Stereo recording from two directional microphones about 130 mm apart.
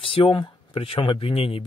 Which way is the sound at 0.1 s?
40° left (ahead or behind).